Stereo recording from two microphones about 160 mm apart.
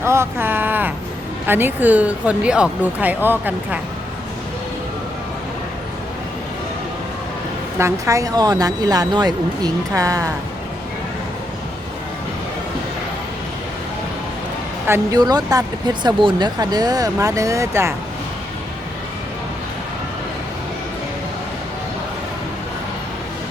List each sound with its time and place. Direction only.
0.0 s a sound: 15° right (ahead or behind)
1.5 s speech: 10° right (ahead or behind)
7.8 s speech: 20° right (ahead or behind)
14.8 s speech: 20° right (ahead or behind)